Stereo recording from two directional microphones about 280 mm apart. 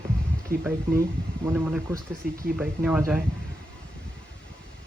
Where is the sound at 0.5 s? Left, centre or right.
Right.